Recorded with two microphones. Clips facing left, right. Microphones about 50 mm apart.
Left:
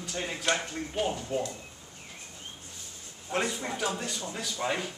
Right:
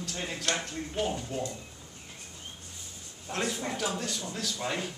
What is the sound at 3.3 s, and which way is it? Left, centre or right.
Speech, centre.